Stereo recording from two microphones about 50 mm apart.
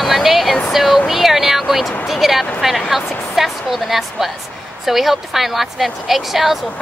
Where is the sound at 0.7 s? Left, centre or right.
Centre.